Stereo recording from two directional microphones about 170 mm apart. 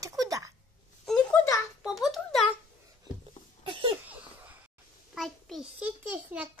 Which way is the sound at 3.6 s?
30° right (ahead or behind).